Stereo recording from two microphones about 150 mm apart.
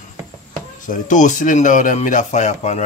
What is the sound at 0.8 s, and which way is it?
Speech, 55° left (ahead or behind).